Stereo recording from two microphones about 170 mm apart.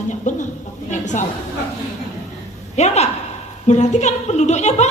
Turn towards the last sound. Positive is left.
turn(degrees=40)  # may be behind; listen again after turning